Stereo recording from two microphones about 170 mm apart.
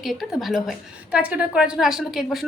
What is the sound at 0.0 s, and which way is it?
A woman's voice, centre (ahead or behind).